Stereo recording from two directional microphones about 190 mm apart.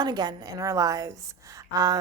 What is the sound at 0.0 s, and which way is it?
A woman's voice, 20° right (ahead or behind).